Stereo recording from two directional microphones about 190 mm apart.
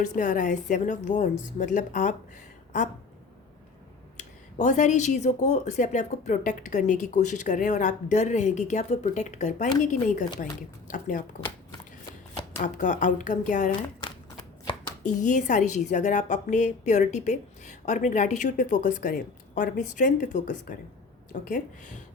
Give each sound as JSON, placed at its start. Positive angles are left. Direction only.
{"t": 0.0, "sound": "speech", "side_deg": 40}
{"t": 4.2, "sound": "speech", "side_deg": 40}
{"t": 12.6, "sound": "speech", "side_deg": 40}
{"t": 14.0, "sound": "shuffling cards", "side_deg": 25}
{"t": 15.0, "sound": "speech", "side_deg": 40}